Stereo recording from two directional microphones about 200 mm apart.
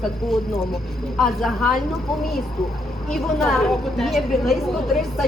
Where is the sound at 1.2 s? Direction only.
Centre (ahead or behind).